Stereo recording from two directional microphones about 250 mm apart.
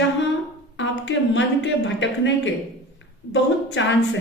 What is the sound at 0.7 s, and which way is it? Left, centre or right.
A woman's voice, left.